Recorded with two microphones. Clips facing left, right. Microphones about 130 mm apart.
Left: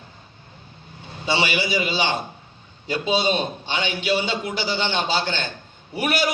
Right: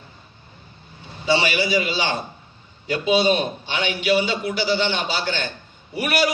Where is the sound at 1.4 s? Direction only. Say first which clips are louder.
Right 1 dB; 25° left (ahead or behind).